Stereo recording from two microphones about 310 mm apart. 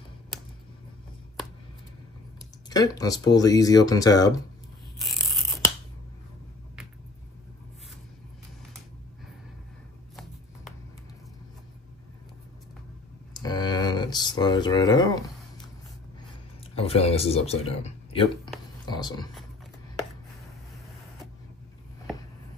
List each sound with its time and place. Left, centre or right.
2.7 s speech: centre
13.3 s a sound: centre
16.7 s speech: centre